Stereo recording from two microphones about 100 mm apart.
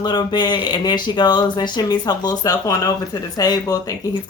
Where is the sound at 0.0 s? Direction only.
45° left (ahead or behind).